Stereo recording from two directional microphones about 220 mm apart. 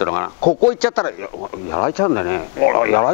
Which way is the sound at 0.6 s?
10° left (ahead or behind).